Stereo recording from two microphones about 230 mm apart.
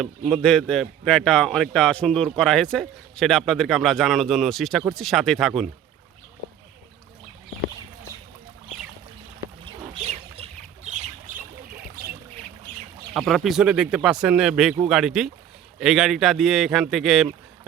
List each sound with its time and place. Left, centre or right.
0.3 s a man's voice: centre
10.1 s bird: right
13.1 s a man's voice: centre